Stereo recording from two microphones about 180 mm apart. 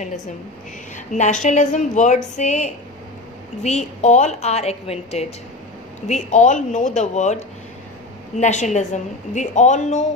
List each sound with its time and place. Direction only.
0.9 s a woman's voice: 40° left (ahead or behind)
8.4 s a woman's voice: 40° left (ahead or behind)